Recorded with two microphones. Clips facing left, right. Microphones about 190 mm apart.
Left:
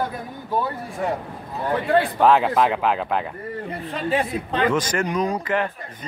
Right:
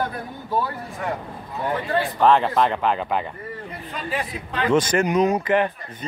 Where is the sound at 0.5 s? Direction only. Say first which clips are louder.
Left 1 dB; 20° left (ahead or behind).